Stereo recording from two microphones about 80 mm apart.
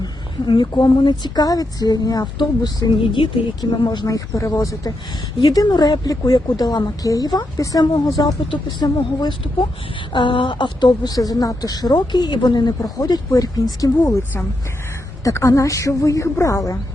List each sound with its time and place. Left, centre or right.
0.0 s a woman's voice: left
3.6 s a woman's voice: left
4.0 s a woman's voice: left
5.4 s a woman's voice: left
8.4 s a woman's voice: left
15.2 s a woman's voice: left